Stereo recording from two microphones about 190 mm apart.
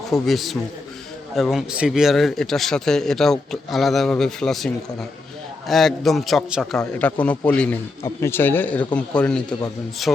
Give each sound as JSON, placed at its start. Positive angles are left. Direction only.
{"t": 0.1, "sound": "a man's voice", "side_deg": 0}